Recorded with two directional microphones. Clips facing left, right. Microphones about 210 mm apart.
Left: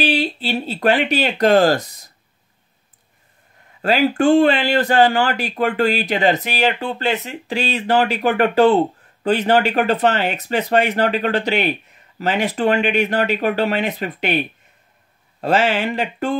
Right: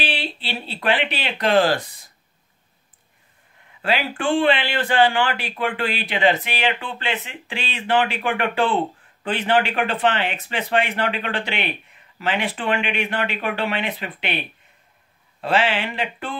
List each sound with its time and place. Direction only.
0.0 s speech: 40° left (ahead or behind)
3.8 s speech: 40° left (ahead or behind)
15.4 s speech: 45° left (ahead or behind)